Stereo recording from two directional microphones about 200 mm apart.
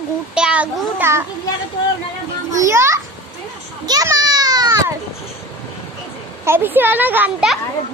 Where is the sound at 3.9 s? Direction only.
20° right (ahead or behind).